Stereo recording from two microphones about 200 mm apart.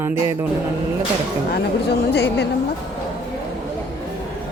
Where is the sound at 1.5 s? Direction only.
55° left (ahead or behind).